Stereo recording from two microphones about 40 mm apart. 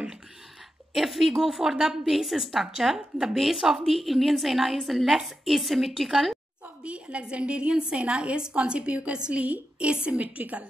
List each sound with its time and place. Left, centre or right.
0.9 s a woman's voice: centre
6.8 s a woman's voice: right
10.2 s a woman's voice: right